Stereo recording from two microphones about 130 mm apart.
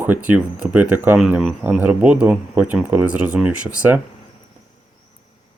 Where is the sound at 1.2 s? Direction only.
5° right (ahead or behind).